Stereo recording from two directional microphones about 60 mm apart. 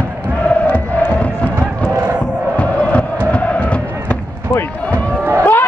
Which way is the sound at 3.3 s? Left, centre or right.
Left.